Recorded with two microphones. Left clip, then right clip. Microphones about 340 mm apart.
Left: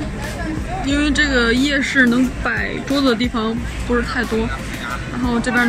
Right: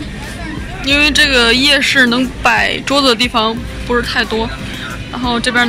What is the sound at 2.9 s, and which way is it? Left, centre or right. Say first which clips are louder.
Speech: right 6 dB; centre.